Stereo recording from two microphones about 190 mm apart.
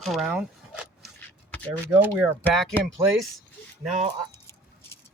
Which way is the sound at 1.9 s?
10° right (ahead or behind).